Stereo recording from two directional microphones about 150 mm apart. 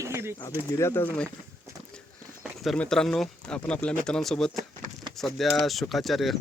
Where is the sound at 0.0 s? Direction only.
20° right (ahead or behind).